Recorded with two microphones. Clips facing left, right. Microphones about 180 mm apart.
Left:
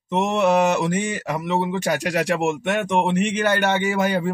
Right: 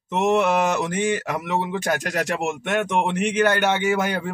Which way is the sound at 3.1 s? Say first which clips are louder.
Right 1 dB; centre (ahead or behind).